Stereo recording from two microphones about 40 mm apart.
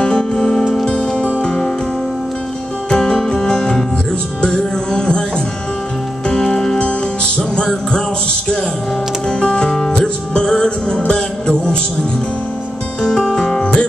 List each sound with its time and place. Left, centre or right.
0.0 s music: centre
2.9 s music: centre
6.5 s music: centre
6.8 s music: left
9.3 s music: left
13.3 s music: centre
13.6 s music: left